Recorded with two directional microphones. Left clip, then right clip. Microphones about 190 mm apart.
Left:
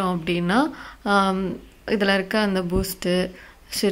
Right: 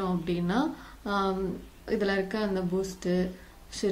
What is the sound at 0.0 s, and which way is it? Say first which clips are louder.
Speech: left 7 dB; 40° left (ahead or behind).